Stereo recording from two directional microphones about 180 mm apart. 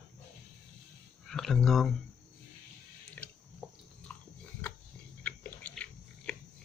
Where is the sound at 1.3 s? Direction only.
Centre (ahead or behind).